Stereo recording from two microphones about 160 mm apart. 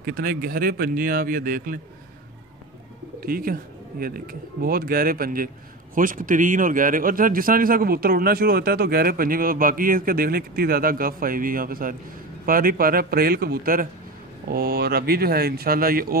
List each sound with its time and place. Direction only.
0.0 s speech: 65° right (ahead or behind)
3.2 s speech: 65° right (ahead or behind)